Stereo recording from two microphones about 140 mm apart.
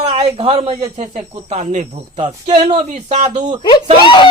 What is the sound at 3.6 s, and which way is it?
Speech, 35° left (ahead or behind).